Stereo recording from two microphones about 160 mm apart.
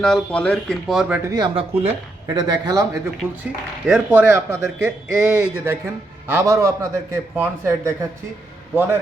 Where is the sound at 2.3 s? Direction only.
25° right (ahead or behind).